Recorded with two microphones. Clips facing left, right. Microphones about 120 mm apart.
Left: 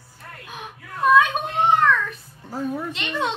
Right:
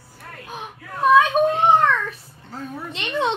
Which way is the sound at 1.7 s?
25° right (ahead or behind).